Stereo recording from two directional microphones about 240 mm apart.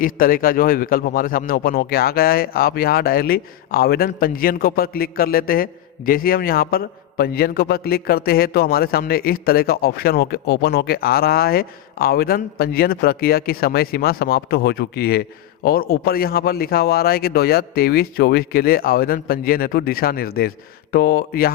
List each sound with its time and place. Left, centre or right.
0.0 s a man's voice: left